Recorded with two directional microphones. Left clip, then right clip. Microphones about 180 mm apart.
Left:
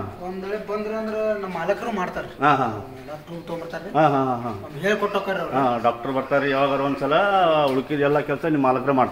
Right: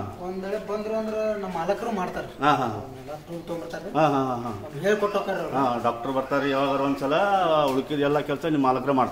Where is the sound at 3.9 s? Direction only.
25° left (ahead or behind).